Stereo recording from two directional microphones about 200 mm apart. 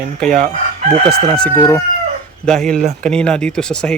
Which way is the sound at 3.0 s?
5° left (ahead or behind).